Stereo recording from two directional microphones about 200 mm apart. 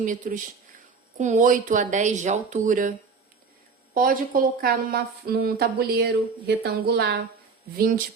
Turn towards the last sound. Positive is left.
turn(degrees=-45)  # may be behind; listen again after turning